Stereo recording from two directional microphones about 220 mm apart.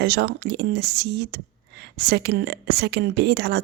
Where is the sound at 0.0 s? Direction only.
50° right (ahead or behind).